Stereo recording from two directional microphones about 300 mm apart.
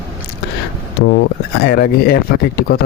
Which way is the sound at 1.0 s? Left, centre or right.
Left.